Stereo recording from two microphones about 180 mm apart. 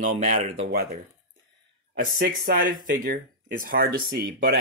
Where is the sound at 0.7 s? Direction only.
55° right (ahead or behind).